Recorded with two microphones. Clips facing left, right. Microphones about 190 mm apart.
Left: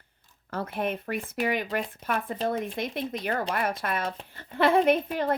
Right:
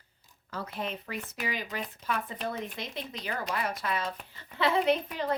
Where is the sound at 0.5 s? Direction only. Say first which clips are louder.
Left 6 dB; 55° left (ahead or behind).